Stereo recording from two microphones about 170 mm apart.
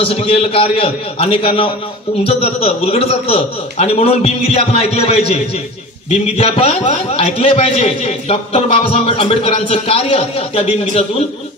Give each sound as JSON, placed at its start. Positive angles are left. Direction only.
{"t": 0.0, "sound": "a man's voice", "side_deg": 35}